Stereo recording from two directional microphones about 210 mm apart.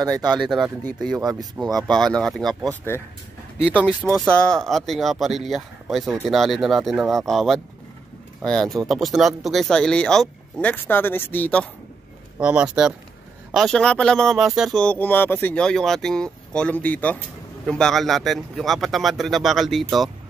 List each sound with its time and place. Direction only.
0.0 s speech: 20° right (ahead or behind)
0.4 s speech: centre (ahead or behind)
12.4 s speech: 5° right (ahead or behind)